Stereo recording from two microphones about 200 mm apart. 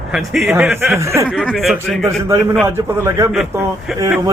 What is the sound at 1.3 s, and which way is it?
Chuckle, centre (ahead or behind).